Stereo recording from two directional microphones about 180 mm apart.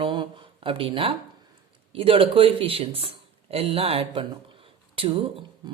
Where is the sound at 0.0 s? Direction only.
25° right (ahead or behind).